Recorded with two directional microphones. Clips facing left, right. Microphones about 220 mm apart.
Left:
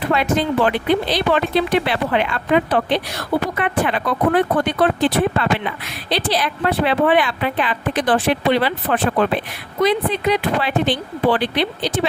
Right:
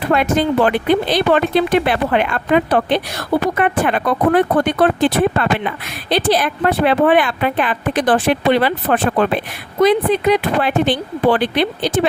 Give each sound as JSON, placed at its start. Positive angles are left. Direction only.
{"t": 0.1, "sound": "speech", "side_deg": -50}